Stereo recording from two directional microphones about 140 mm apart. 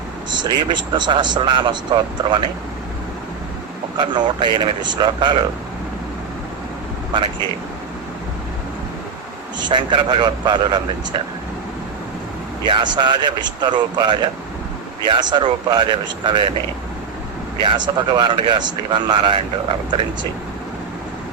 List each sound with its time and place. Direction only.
0.3 s a man's voice: 30° right (ahead or behind)
3.9 s a man's voice: 35° right (ahead or behind)
9.6 s a man's voice: 35° right (ahead or behind)
12.6 s a man's voice: 35° right (ahead or behind)
17.6 s a man's voice: 35° right (ahead or behind)